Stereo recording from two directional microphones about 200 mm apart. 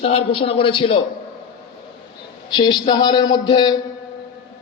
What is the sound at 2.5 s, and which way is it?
A man's voice, 20° left (ahead or behind).